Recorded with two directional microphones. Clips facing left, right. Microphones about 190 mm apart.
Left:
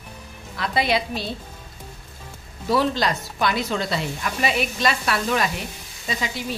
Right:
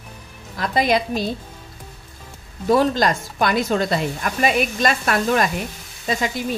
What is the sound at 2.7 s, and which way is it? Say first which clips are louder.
A woman's voice: right 4 dB; 45° right (ahead or behind).